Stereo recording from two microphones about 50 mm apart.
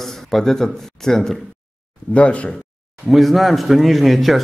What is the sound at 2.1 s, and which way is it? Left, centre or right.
Speech, left.